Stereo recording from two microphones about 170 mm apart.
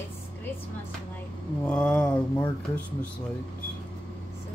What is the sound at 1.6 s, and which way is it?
Speech, 5° left (ahead or behind).